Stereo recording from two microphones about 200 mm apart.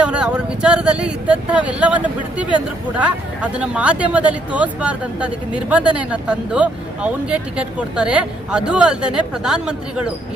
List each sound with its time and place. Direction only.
0.0 s speech: 5° right (ahead or behind)
3.0 s speech: 5° right (ahead or behind)